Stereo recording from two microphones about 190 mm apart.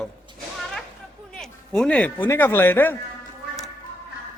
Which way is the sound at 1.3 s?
5° left (ahead or behind).